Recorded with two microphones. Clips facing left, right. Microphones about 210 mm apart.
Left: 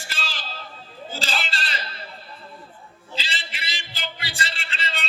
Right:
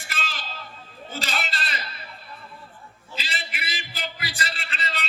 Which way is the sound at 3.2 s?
30° left (ahead or behind).